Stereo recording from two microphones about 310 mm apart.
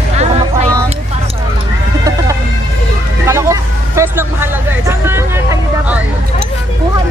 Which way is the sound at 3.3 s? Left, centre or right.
Centre.